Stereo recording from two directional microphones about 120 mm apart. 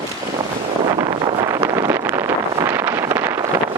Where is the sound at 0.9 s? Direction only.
40° right (ahead or behind).